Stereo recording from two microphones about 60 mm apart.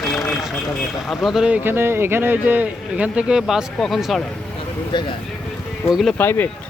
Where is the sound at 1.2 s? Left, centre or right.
Centre.